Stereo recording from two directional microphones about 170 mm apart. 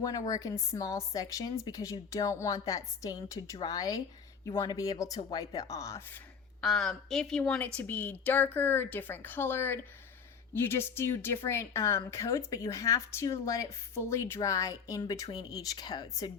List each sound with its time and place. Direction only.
0.0 s speech: 20° left (ahead or behind)
6.6 s speech: centre (ahead or behind); by 16.3 s 25° left (ahead or behind)